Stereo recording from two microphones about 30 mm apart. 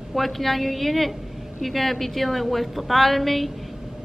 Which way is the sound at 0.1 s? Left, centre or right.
Centre.